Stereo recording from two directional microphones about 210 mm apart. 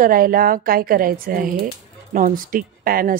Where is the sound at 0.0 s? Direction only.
40° right (ahead or behind).